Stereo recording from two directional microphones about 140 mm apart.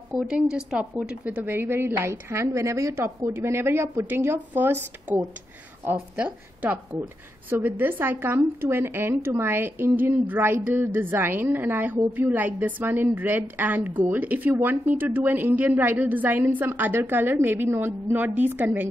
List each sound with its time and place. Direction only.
0.1 s speech: 5° right (ahead or behind)
5.9 s speech: 15° right (ahead or behind)